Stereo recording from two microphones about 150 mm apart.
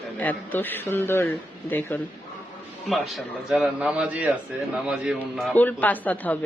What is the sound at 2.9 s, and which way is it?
A man's voice, centre (ahead or behind).